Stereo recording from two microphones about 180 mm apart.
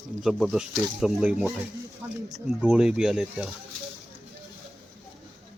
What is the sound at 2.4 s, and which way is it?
Speech, 5° right (ahead or behind).